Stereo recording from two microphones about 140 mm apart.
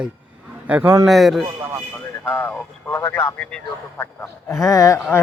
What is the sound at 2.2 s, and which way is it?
Speech, 15° left (ahead or behind).